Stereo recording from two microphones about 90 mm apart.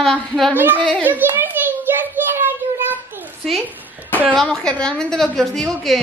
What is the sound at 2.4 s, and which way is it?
Child singing, 25° right (ahead or behind).